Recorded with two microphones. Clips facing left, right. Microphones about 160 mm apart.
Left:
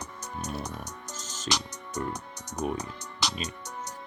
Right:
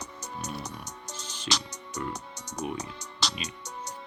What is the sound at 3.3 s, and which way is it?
Music, 45° left (ahead or behind).